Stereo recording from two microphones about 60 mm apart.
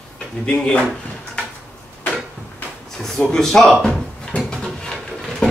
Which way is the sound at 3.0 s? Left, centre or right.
Centre.